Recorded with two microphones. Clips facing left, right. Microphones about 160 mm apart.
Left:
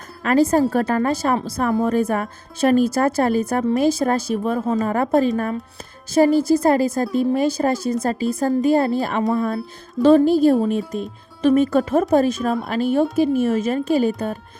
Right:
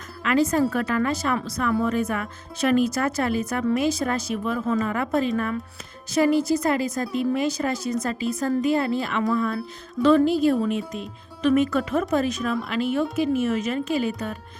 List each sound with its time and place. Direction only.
0.2 s speech: 40° left (ahead or behind)
1.6 s speech: 45° left (ahead or behind)
10.1 s speech: 35° left (ahead or behind)
11.4 s speech: 30° left (ahead or behind)
12.5 s speech: 40° left (ahead or behind)